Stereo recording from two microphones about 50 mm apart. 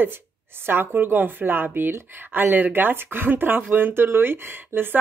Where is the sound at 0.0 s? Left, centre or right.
Right.